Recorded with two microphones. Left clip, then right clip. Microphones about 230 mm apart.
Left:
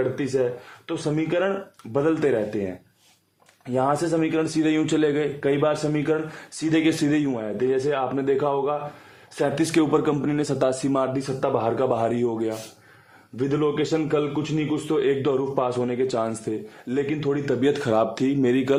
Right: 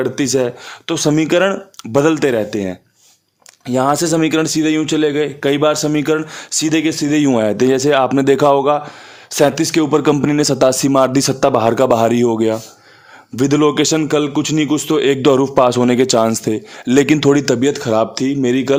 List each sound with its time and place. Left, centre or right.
0.0 s a man's voice: right
5.5 s speech: right
6.8 s speech: right
7.2 s a man's voice: right
9.6 s speech: right
13.3 s a man's voice: right
17.6 s speech: right